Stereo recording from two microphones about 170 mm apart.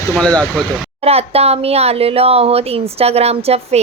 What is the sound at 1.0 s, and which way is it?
Speech, 35° right (ahead or behind).